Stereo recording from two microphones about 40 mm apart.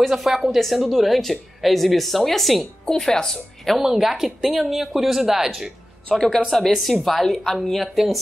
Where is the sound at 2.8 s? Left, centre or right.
Centre.